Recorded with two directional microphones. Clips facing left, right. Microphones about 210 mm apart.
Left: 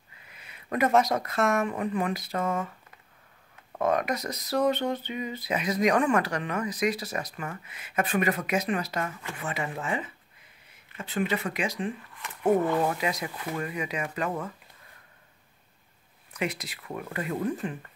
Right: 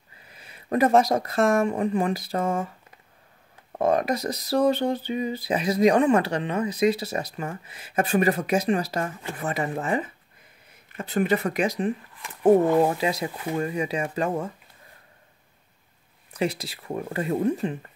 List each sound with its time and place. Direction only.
0.3 s speech: 35° right (ahead or behind)
3.7 s speech: 30° right (ahead or behind)
16.3 s speech: 30° right (ahead or behind)